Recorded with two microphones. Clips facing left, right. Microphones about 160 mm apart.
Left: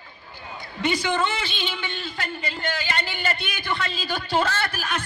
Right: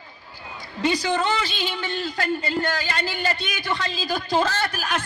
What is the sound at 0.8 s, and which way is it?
A man's voice, 35° right (ahead or behind).